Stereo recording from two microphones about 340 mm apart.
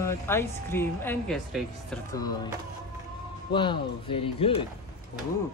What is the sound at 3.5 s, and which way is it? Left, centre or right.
Speech, centre.